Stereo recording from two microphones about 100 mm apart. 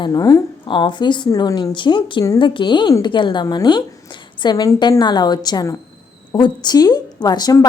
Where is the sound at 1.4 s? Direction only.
40° left (ahead or behind).